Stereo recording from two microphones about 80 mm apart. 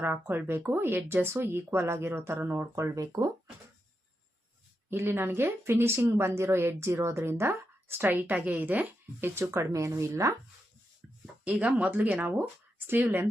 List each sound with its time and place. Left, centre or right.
0.0 s speech: right
2.9 s speech: right
4.9 s speech: right
11.4 s speech: centre